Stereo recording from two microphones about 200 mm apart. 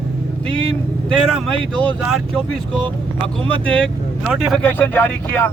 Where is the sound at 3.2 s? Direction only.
25° right (ahead or behind).